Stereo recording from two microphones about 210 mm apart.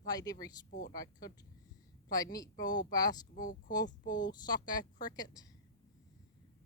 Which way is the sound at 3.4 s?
40° left (ahead or behind).